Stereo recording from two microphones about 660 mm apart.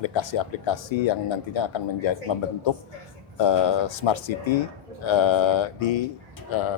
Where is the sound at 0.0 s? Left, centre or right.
Left.